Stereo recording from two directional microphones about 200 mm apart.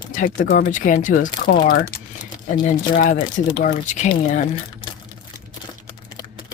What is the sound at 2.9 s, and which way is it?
Speech, 45° left (ahead or behind).